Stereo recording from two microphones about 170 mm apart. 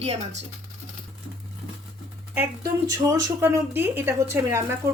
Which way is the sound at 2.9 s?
20° right (ahead or behind).